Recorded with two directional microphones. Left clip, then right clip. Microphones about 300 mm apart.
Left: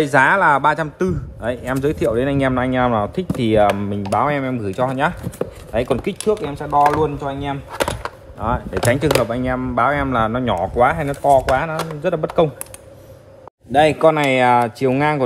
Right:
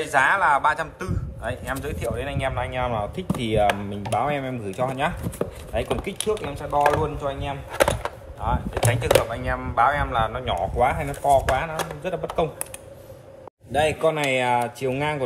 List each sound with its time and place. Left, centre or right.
0.0 s speech: left
13.7 s speech: left